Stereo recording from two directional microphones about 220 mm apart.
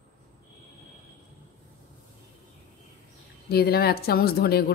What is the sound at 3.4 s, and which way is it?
Speech, 45° left (ahead or behind).